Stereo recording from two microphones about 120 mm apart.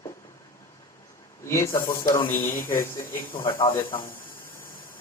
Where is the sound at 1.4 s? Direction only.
25° left (ahead or behind).